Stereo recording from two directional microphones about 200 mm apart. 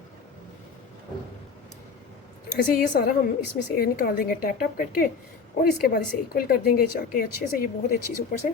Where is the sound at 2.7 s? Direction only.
45° left (ahead or behind).